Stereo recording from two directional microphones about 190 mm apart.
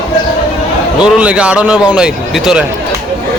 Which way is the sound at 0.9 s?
5° right (ahead or behind).